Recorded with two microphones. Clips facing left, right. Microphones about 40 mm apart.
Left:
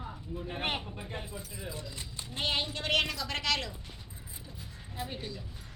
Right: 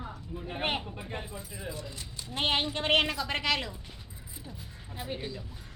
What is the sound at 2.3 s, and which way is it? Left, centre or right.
A woman's voice, right.